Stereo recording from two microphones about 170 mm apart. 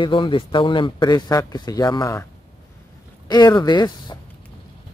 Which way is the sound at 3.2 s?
25° left (ahead or behind).